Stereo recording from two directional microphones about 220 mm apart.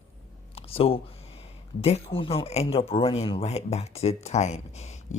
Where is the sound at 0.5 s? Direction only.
25° left (ahead or behind).